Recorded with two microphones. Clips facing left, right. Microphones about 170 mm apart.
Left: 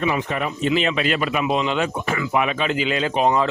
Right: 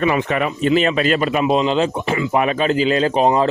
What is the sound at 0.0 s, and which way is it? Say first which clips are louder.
Speech: right 5 dB; 70° right (ahead or behind).